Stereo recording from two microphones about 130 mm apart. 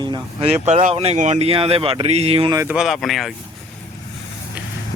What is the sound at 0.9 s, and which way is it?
Speech, 55° right (ahead or behind).